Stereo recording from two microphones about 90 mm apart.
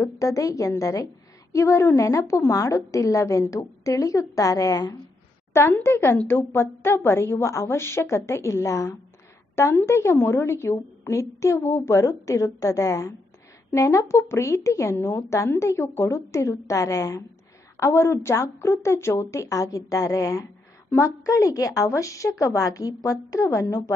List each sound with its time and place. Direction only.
0.0 s a woman's voice: 40° left (ahead or behind)
5.5 s a woman's voice: 30° left (ahead or behind)